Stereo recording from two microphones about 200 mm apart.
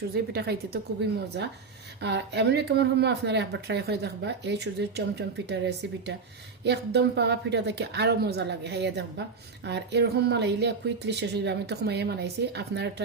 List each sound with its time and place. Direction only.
0.1 s a woman's voice: 50° right (ahead or behind)
2.0 s speech: 60° right (ahead or behind)